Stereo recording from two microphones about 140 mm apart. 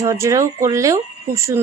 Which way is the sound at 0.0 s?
20° right (ahead or behind).